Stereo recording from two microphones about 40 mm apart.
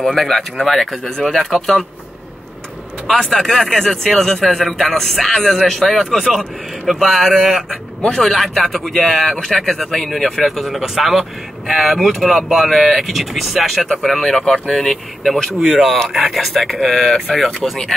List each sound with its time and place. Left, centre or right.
0.0 s a man's voice: centre
0.6 s speech: centre
3.1 s a man's voice: centre
9.3 s speech: centre
12.0 s a man's voice: centre
15.6 s a man's voice: centre